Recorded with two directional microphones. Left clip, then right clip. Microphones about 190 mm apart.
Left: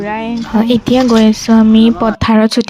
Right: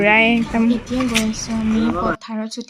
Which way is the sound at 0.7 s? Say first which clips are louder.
Left 10 dB; 50° left (ahead or behind).